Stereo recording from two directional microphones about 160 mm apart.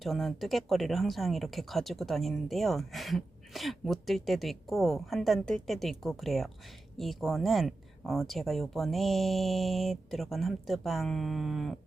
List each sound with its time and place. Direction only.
0.0 s speech: centre (ahead or behind)